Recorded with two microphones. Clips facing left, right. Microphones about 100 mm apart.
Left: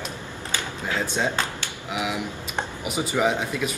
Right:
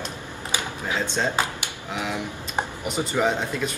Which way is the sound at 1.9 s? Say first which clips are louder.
Left 1 dB; 10° left (ahead or behind).